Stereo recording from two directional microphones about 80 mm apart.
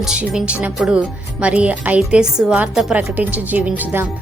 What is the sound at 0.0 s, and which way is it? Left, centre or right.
A woman's voice, centre.